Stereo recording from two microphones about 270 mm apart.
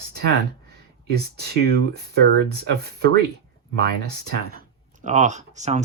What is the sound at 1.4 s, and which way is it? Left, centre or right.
Speech, right.